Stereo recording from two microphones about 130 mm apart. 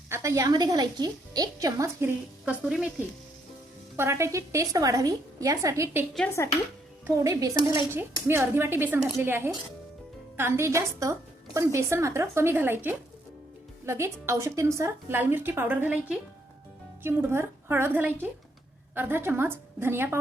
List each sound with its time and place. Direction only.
0.1 s a woman's voice: 25° right (ahead or behind)
2.4 s speech: 5° right (ahead or behind)
3.9 s a woman's voice: 20° right (ahead or behind)
7.3 s a woman's voice: 25° right (ahead or behind)